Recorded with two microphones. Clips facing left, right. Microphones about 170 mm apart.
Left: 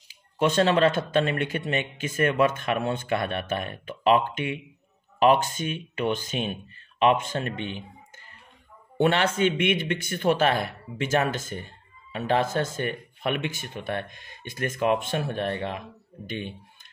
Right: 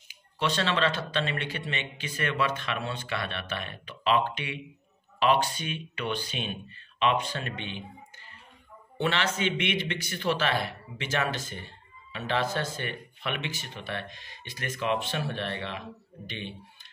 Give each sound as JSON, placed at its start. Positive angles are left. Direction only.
{"t": 0.4, "sound": "speech", "side_deg": 45}
{"t": 8.9, "sound": "speech", "side_deg": 50}